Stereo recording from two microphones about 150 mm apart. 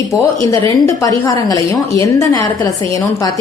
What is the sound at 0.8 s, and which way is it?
Speech, 25° left (ahead or behind).